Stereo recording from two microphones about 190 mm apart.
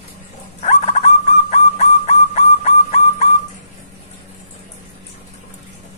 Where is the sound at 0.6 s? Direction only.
35° left (ahead or behind).